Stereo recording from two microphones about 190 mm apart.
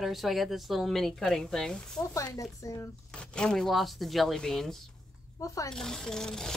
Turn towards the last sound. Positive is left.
turn(degrees=5)  # may be behind; listen again after turning